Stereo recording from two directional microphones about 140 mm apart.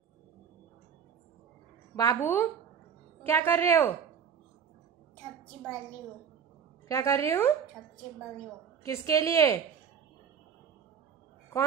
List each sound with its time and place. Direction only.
2.0 s a woman's voice: 20° left (ahead or behind)
6.9 s a woman's voice: 20° left (ahead or behind)
8.8 s a woman's voice: 20° left (ahead or behind)